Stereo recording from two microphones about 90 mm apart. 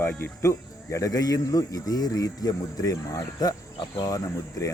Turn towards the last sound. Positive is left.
turn(degrees=40)  # may be behind; listen again after turning